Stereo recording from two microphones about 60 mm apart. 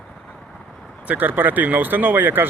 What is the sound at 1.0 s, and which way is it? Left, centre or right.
A man's voice, right.